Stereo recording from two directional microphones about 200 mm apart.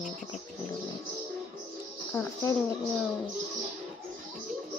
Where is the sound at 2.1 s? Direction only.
10° left (ahead or behind).